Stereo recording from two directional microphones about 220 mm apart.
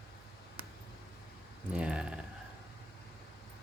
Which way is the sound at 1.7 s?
5° right (ahead or behind).